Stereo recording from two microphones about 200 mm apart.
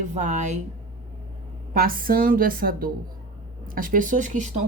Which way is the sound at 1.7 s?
45° right (ahead or behind).